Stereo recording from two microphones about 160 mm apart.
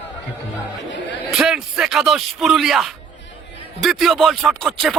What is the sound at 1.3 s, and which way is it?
Speech, centre (ahead or behind).